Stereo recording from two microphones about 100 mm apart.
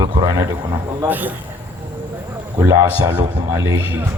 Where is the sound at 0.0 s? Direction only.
30° right (ahead or behind).